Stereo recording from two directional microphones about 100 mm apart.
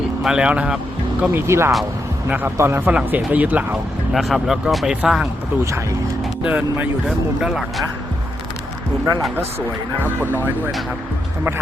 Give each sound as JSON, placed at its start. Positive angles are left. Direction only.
{"t": 0.2, "sound": "speech", "side_deg": -5}
{"t": 1.2, "sound": "speech", "side_deg": -20}
{"t": 2.9, "sound": "speech", "side_deg": -15}
{"t": 4.1, "sound": "speech", "side_deg": 0}
{"t": 6.4, "sound": "speech", "side_deg": -15}
{"t": 7.4, "sound": "speech", "side_deg": 0}